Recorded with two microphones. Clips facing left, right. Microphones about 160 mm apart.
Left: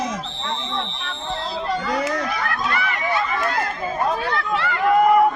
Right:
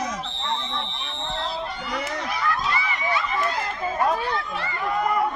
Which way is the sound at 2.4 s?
60° left (ahead or behind).